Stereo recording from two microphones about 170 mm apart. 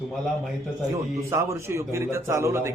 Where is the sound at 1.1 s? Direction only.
15° right (ahead or behind).